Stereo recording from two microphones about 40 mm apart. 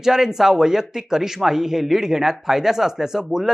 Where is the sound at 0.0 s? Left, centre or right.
Centre.